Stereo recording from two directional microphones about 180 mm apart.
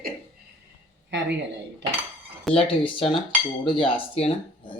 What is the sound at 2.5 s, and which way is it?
Speech, 30° left (ahead or behind).